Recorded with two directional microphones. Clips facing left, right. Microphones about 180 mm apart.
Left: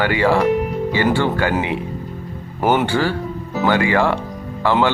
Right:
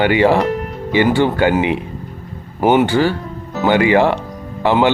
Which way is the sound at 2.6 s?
5° right (ahead or behind).